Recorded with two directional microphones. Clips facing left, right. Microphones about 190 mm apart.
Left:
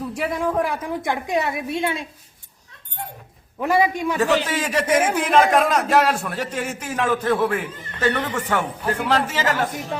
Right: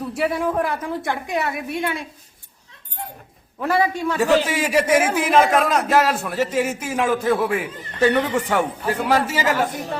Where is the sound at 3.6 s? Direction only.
15° left (ahead or behind).